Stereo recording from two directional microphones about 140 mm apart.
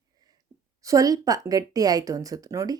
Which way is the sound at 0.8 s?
25° right (ahead or behind).